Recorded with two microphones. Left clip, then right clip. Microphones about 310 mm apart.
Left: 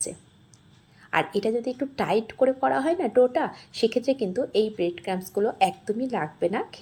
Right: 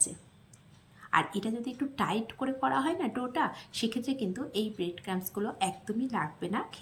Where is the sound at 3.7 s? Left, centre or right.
Centre.